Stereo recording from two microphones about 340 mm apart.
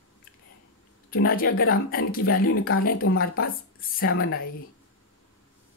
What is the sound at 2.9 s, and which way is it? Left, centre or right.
Speech, left.